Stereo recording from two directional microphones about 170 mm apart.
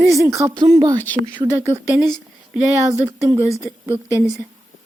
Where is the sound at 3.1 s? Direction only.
20° right (ahead or behind).